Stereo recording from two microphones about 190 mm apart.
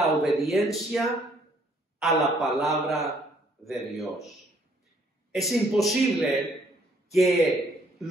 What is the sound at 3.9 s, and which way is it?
Speech, centre (ahead or behind).